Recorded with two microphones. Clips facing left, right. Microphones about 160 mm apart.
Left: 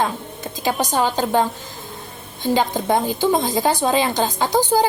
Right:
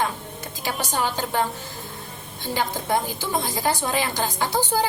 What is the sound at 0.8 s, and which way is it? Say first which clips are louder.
Speech: left 5 dB; 15° left (ahead or behind).